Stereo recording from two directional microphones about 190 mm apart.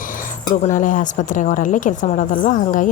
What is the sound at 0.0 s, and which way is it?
A woman's voice, 45° left (ahead or behind).